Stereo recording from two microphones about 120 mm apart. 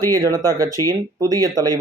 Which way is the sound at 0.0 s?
30° right (ahead or behind).